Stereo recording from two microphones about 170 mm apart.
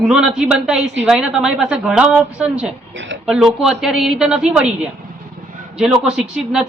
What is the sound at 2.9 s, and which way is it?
Speech, 90° right.